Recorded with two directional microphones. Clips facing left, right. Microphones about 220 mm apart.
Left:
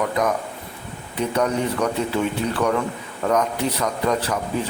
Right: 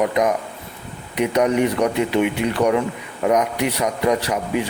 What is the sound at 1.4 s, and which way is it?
Speech, 15° right (ahead or behind).